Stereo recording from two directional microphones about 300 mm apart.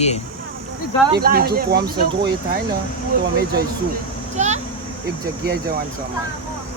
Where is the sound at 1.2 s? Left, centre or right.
Right.